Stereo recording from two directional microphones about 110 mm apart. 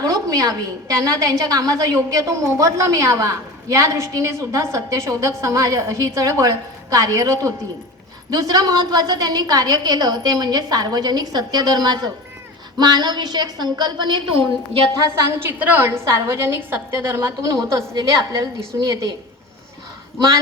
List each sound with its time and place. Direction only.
0.0 s a sound: 35° right (ahead or behind)
1.2 s a woman's voice: 35° right (ahead or behind); by 14.8 s 55° right (ahead or behind)
14.9 s a woman's voice: 25° right (ahead or behind)